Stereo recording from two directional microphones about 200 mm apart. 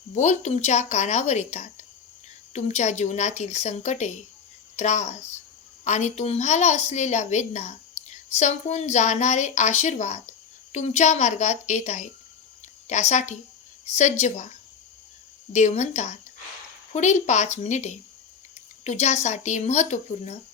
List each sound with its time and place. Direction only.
0.1 s a woman's voice: 35° left (ahead or behind)
15.5 s a woman's voice: 35° left (ahead or behind)